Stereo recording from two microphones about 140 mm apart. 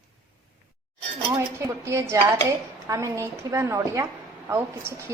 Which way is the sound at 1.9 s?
20° right (ahead or behind).